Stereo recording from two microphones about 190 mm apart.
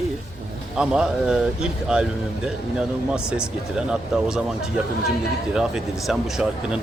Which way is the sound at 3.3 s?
5° right (ahead or behind).